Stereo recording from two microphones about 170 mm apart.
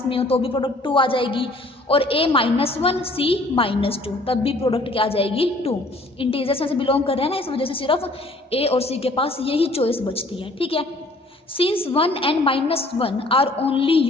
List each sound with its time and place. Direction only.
0.1 s a woman's voice: 35° left (ahead or behind)